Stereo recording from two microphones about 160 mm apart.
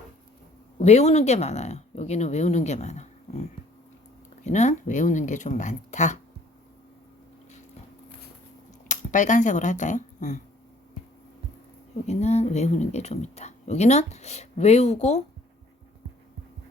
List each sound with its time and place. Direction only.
0.8 s speech: 45° left (ahead or behind)
4.4 s speech: 45° left (ahead or behind)
8.9 s speech: 50° left (ahead or behind)
12.0 s speech: 45° left (ahead or behind)